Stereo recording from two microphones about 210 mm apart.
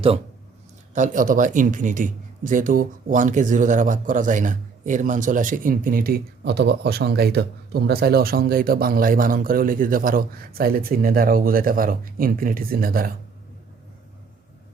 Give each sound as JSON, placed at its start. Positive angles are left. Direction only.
{"t": 0.9, "sound": "speech", "side_deg": -40}